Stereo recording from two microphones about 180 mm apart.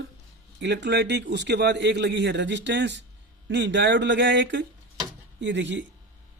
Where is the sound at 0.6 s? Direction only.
70° right (ahead or behind).